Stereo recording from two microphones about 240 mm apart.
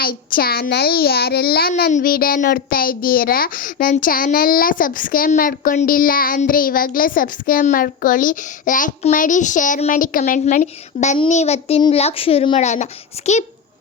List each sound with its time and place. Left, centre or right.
0.0 s a child's voice: left